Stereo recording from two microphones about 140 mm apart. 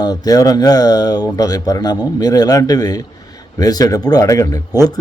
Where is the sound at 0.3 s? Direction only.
25° left (ahead or behind).